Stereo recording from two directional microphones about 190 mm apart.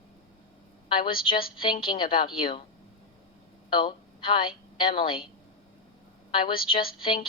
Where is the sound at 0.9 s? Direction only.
25° left (ahead or behind).